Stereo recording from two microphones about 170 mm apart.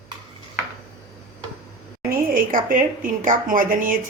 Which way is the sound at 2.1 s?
55° right (ahead or behind).